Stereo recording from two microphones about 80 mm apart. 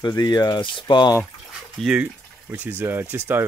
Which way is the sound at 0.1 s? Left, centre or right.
Left.